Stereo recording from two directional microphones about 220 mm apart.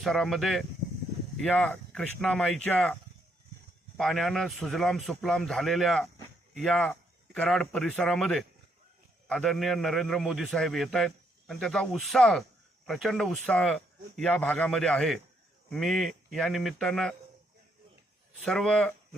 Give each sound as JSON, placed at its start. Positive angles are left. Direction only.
{"t": 0.0, "sound": "a man's voice", "side_deg": 0}
{"t": 18.4, "sound": "a man's voice", "side_deg": 5}